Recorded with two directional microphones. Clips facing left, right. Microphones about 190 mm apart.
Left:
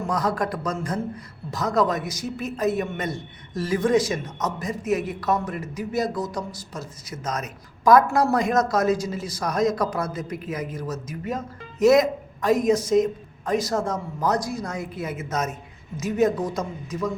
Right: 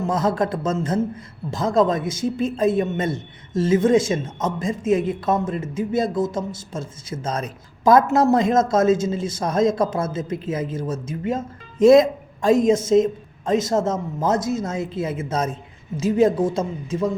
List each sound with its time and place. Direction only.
0.1 s a woman's voice: 25° right (ahead or behind)